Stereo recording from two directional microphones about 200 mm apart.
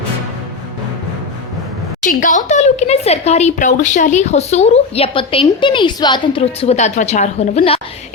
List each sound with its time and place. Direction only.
2.0 s speech: 40° left (ahead or behind)